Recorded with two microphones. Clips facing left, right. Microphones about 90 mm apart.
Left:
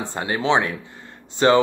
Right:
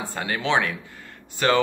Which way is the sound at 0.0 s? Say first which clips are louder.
Left 3 dB; 20° left (ahead or behind).